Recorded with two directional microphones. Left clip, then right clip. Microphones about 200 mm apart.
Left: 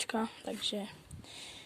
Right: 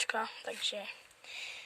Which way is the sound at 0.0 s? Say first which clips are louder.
Right 2 dB; 10° left (ahead or behind).